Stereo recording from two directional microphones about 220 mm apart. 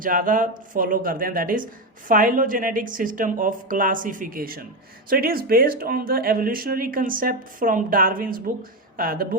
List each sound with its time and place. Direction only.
0.0 s speech: 40° right (ahead or behind)